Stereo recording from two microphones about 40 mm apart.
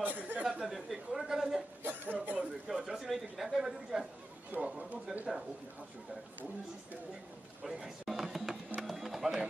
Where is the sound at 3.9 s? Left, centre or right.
Centre.